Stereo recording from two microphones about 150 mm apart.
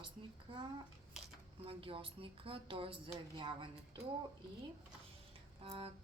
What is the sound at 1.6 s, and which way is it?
Speech, 40° right (ahead or behind).